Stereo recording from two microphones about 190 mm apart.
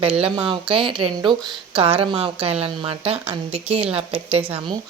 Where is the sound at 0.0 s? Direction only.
30° right (ahead or behind).